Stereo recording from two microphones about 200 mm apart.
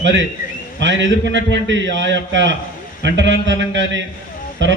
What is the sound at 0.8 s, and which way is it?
A man's voice, 65° right (ahead or behind).